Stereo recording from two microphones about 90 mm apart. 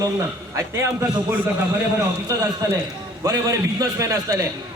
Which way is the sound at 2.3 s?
40° right (ahead or behind).